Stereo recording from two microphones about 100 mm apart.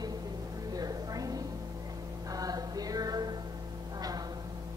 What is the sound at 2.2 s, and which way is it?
Music, 35° right (ahead or behind).